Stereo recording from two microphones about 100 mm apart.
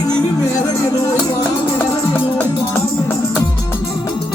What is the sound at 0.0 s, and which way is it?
Music, 40° left (ahead or behind).